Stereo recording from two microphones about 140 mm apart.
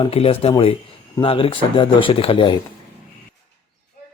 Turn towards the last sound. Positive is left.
turn(degrees=35)  # may be behind; listen again after turning